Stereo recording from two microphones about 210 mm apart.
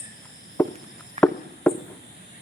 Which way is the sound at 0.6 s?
10° left (ahead or behind).